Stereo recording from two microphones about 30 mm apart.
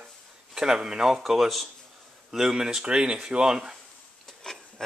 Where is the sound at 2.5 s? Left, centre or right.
Right.